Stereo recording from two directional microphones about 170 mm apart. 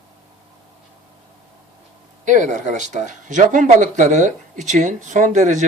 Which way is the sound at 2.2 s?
45° right (ahead or behind).